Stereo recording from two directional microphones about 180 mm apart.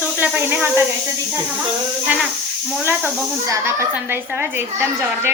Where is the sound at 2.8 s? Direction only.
10° right (ahead or behind).